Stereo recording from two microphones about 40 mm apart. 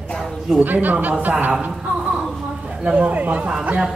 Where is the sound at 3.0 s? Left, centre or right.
Right.